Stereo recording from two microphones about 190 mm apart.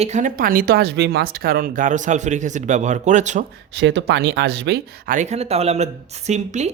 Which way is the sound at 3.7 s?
70° right (ahead or behind).